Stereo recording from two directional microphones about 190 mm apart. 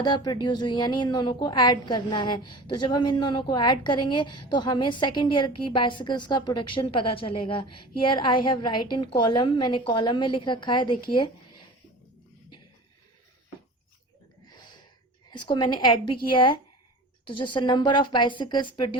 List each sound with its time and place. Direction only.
0.0 s a woman's voice: 20° left (ahead or behind)
15.3 s a woman's voice: 25° left (ahead or behind)